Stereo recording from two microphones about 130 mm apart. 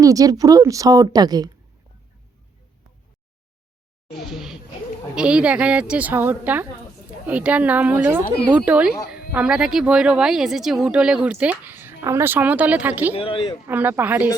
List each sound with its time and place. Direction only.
0.0 s a woman's voice: 25° right (ahead or behind)
4.2 s speech: centre (ahead or behind)
13.1 s speech: 40° left (ahead or behind)
13.7 s speech: 15° right (ahead or behind)